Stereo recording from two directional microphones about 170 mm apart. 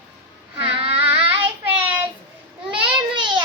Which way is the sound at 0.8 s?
30° right (ahead or behind).